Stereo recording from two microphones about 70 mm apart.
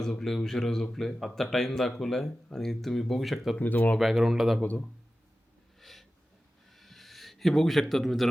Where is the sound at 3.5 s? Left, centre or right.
Left.